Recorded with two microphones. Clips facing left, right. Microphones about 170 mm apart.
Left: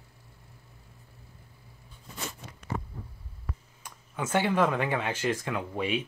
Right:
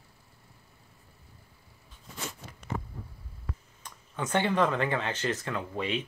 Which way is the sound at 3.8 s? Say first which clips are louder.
Left 1 dB; 10° left (ahead or behind).